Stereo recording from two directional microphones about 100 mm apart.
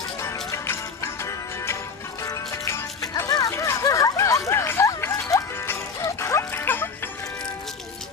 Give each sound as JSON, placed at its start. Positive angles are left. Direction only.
{"t": 0.5, "sound": "music", "side_deg": 25}
{"t": 3.2, "sound": "a sound", "side_deg": 35}
{"t": 6.1, "sound": "music", "side_deg": 25}